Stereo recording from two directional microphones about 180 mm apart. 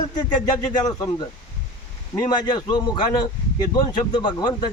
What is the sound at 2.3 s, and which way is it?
A man's voice, 25° left (ahead or behind).